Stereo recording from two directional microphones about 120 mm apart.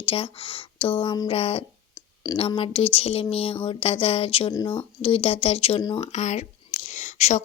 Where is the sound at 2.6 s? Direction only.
50° left (ahead or behind).